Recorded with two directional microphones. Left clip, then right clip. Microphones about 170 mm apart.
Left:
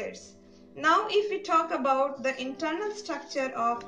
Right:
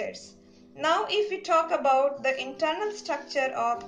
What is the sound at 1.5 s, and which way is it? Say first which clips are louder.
Speech: right 3 dB; 45° right (ahead or behind).